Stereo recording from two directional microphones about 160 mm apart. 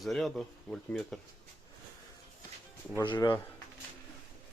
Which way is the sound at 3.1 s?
30° left (ahead or behind).